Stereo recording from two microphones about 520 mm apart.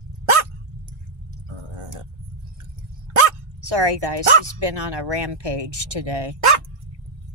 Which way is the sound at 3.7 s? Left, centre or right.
Right.